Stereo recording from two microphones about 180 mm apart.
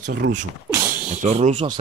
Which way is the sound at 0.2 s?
75° right (ahead or behind).